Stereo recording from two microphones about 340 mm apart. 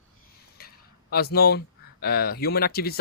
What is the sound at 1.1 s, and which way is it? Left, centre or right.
Speech, left.